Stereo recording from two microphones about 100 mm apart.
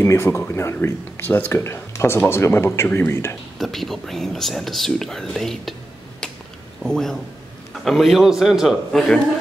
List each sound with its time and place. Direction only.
0.0 s speech: 25° left (ahead or behind)
3.5 s speech: centre (ahead or behind)
6.8 s a man's voice: 5° left (ahead or behind)